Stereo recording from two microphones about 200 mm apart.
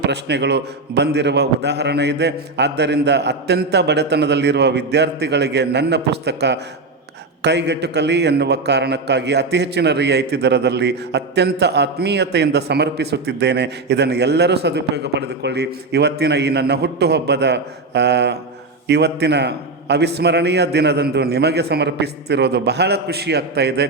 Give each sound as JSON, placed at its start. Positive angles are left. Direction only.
{"t": 0.1, "sound": "a man's voice", "side_deg": -60}